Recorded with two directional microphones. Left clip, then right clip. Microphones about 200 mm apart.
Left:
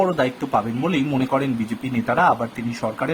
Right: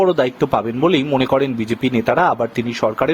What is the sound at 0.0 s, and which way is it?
A man's voice, 40° right (ahead or behind).